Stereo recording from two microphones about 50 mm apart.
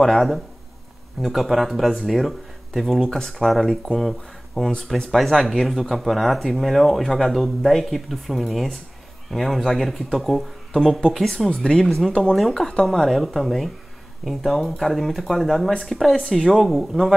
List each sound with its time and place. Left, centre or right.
0.0 s speech: centre
11.5 s speech: centre
12.1 s speech: centre
16.2 s speech: centre
16.4 s speech: centre